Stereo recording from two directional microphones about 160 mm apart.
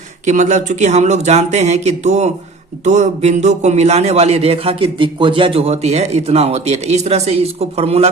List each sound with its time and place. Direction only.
0.3 s a man's voice: 50° right (ahead or behind)